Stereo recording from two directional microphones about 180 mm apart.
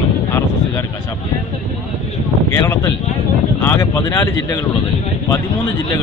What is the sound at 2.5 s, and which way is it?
Speech, 15° left (ahead or behind).